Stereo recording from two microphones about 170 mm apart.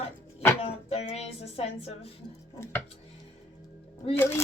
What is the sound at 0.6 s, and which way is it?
A woman's voice, 35° left (ahead or behind).